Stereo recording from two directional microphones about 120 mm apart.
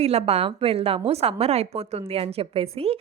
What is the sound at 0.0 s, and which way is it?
A woman's voice, 60° right (ahead or behind).